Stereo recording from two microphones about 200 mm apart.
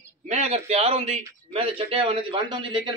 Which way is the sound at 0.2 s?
35° right (ahead or behind).